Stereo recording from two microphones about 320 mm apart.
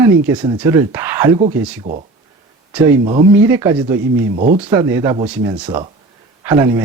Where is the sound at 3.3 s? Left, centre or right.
Centre.